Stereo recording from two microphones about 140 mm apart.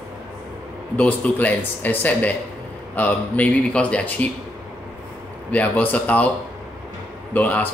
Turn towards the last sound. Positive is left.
turn(degrees=10)  # may be behind; listen again after turning